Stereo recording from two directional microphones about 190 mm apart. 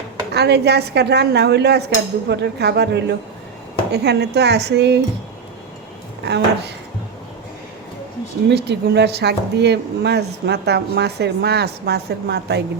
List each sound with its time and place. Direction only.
0.3 s speech: 60° right (ahead or behind)
6.2 s speech: 60° right (ahead or behind)
8.4 s speech: 65° right (ahead or behind)